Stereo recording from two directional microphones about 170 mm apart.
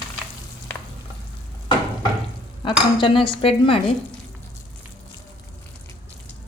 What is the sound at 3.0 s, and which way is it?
Sizzle, 30° left (ahead or behind).